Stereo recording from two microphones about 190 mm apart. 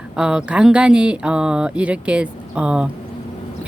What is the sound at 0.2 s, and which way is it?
A woman's voice, 5° right (ahead or behind).